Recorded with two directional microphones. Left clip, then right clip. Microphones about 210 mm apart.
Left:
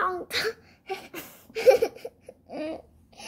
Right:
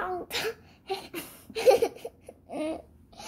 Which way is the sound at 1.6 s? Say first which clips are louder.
Left 2 dB; 30° left (ahead or behind).